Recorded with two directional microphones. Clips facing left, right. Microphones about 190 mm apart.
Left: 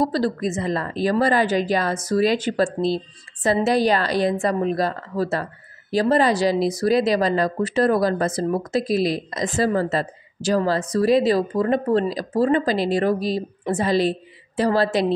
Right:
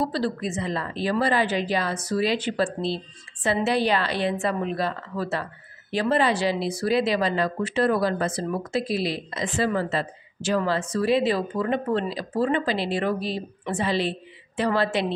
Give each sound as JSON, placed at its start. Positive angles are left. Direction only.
{"t": 0.0, "sound": "a woman's voice", "side_deg": 40}